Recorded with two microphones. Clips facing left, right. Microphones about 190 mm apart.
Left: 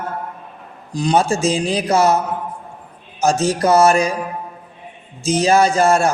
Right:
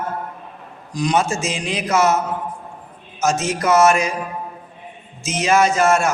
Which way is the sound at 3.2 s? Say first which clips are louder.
Left 4 dB; 35° left (ahead or behind).